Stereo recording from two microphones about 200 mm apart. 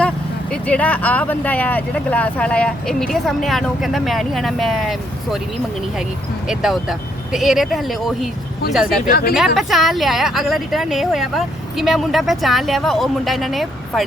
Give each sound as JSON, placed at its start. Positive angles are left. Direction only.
{"t": 0.5, "sound": "speech", "side_deg": 5}
{"t": 6.5, "sound": "speech", "side_deg": 0}
{"t": 9.0, "sound": "speech", "side_deg": 50}
{"t": 9.6, "sound": "speech", "side_deg": 0}